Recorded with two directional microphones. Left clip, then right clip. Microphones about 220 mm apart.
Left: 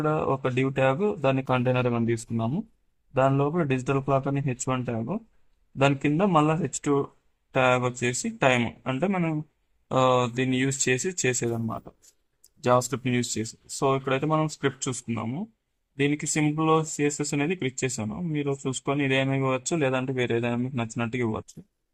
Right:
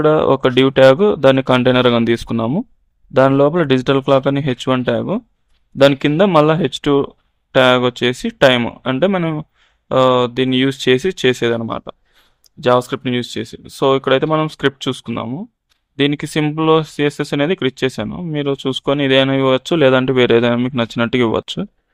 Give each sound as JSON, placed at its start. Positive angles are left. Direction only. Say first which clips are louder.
{"t": 0.0, "sound": "speech", "louder": "right 13 dB", "side_deg": -45}